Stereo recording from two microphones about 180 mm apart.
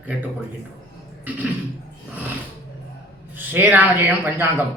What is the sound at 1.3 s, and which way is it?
Speech, 10° right (ahead or behind).